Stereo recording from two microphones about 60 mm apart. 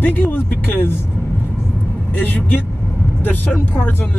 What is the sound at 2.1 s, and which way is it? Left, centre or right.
Speech, left.